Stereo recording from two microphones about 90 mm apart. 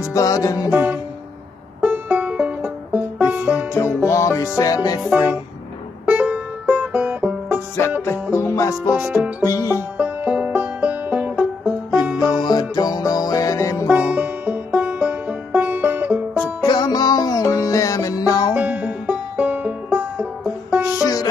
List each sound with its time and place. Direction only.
0.1 s music: 40° left (ahead or behind)
0.7 s music: 15° right (ahead or behind)
3.7 s music: 30° left (ahead or behind)
6.0 s music: 15° right (ahead or behind)
8.0 s music: 30° left (ahead or behind)
9.0 s music: 15° right (ahead or behind)
9.4 s music: 40° left (ahead or behind)
9.9 s music: 15° right (ahead or behind)
12.2 s music: 50° left (ahead or behind)
13.8 s music: 15° right (ahead or behind)
16.6 s music: 55° left (ahead or behind)
18.5 s music: 20° right (ahead or behind)
21.0 s music: 45° left (ahead or behind)